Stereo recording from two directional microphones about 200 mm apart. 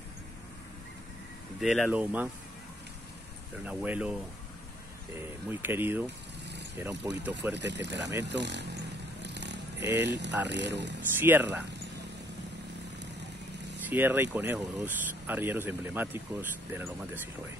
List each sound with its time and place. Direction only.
1.6 s speech: centre (ahead or behind)
3.6 s speech: 5° right (ahead or behind)
5.2 s speech: 10° right (ahead or behind)
7.5 s speech: 60° right (ahead or behind)
9.2 s vehicle: 60° right (ahead or behind)
10.0 s speech: 60° right (ahead or behind)
11.1 s speech: 10° right (ahead or behind)
13.8 s speech: 10° right (ahead or behind)